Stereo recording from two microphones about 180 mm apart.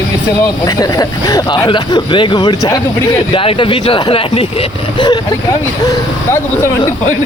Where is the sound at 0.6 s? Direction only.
20° left (ahead or behind).